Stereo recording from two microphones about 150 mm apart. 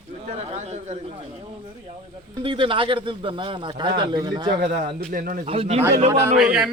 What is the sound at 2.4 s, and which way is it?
Speech, 35° right (ahead or behind).